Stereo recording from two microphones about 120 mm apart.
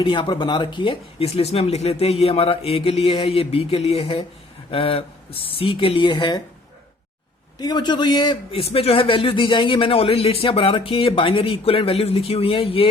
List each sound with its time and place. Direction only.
0.0 s speech: 45° left (ahead or behind)
7.6 s a man's voice: 40° left (ahead or behind)
8.5 s speech: 55° left (ahead or behind)